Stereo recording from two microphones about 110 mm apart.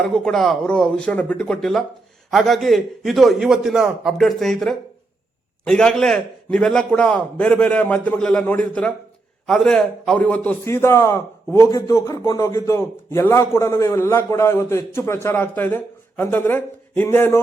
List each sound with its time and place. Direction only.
0.0 s a man's voice: 5° left (ahead or behind)
10.7 s a man's voice: 25° left (ahead or behind)